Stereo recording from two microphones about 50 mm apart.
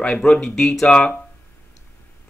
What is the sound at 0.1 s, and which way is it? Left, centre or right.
Speech, centre.